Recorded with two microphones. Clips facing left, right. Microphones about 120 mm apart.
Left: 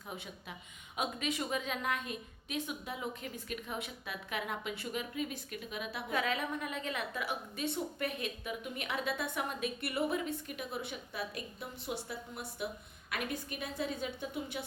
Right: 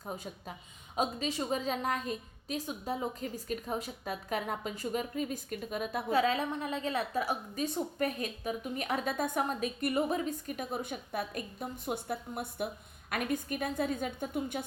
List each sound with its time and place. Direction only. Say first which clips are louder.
0.0 s a woman's voice: right 5 dB; 40° right (ahead or behind)
6.1 s a woman's voice: right 6 dB; 30° right (ahead or behind); by 14.6 s 50° right (ahead or behind)